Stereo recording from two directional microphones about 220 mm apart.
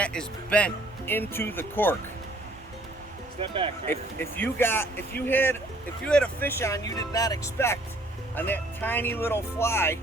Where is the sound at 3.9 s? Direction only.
10° left (ahead or behind).